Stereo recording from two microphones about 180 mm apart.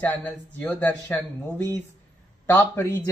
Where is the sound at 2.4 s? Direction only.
10° left (ahead or behind).